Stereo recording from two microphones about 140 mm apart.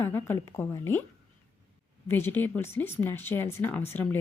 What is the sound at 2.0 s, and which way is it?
Speech, 15° left (ahead or behind).